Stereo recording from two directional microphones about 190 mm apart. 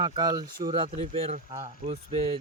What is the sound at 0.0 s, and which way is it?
Speech, 20° right (ahead or behind).